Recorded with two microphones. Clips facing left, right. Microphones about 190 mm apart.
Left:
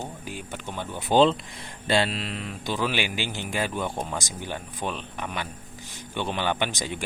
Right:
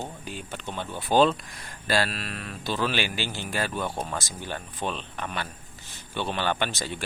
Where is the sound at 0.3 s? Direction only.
10° left (ahead or behind).